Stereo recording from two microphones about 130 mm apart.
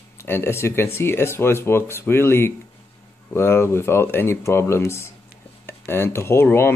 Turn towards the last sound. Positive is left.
turn(degrees=20)  # may be behind; listen again after turning